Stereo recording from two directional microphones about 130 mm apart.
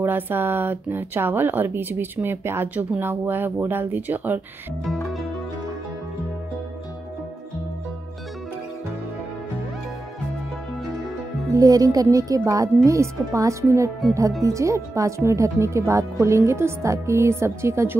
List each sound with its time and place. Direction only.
0.0 s speech: 15° right (ahead or behind)
4.8 s music: centre (ahead or behind)
11.5 s speech: 30° right (ahead or behind)